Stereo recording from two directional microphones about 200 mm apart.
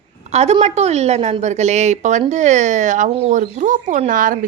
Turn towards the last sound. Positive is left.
turn(degrees=-40)  # may be behind; listen again after turning